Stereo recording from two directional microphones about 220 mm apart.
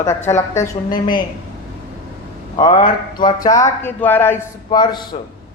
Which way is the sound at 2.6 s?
20° left (ahead or behind).